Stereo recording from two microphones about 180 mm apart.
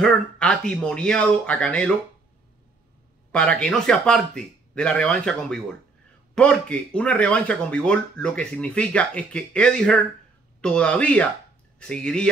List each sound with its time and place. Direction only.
0.0 s speech: 5° left (ahead or behind)
3.3 s a man's voice: 5° left (ahead or behind)